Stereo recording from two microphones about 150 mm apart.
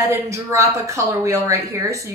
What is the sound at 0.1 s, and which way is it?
A woman's voice, 20° right (ahead or behind).